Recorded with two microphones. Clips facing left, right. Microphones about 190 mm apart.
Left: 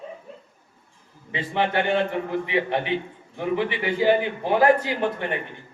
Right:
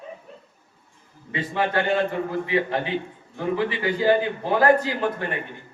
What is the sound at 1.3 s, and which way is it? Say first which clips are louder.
A man's voice: even; 20° left (ahead or behind).